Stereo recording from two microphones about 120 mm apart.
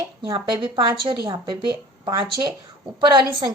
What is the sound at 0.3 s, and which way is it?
A woman's voice, 40° right (ahead or behind).